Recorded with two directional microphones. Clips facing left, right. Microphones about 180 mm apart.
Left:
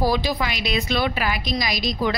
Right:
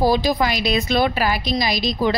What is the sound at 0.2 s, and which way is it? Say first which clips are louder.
A woman's voice: right 5 dB; 40° right (ahead or behind).